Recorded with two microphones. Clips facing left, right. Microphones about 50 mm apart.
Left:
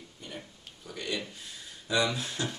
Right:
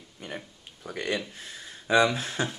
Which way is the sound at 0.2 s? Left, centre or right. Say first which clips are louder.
Right 5 dB; right.